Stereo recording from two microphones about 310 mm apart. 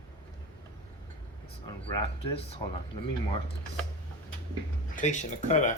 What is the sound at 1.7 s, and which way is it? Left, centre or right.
Speech, centre.